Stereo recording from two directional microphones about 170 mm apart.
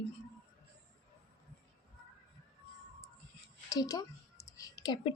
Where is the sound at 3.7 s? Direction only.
20° left (ahead or behind).